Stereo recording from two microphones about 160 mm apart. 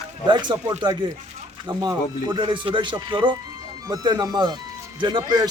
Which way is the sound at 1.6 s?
25° right (ahead or behind).